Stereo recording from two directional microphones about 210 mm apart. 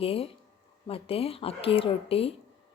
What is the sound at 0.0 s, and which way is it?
A woman's voice, 25° left (ahead or behind).